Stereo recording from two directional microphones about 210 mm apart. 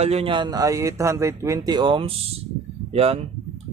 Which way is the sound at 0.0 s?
30° right (ahead or behind).